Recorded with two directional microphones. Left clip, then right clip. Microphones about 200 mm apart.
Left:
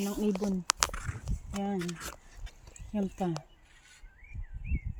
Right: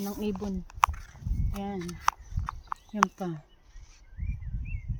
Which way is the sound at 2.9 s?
25° left (ahead or behind).